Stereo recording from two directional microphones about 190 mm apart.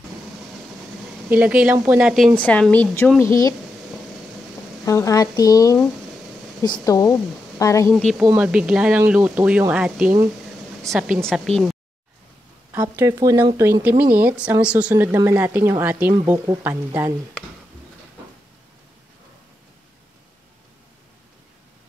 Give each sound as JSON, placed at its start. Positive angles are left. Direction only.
{"t": 1.3, "sound": "speech", "side_deg": -5}
{"t": 2.4, "sound": "a woman's voice", "side_deg": 5}
{"t": 4.8, "sound": "a woman's voice", "side_deg": 15}
{"t": 8.3, "sound": "a woman's voice", "side_deg": -5}
{"t": 12.7, "sound": "a woman's voice", "side_deg": -15}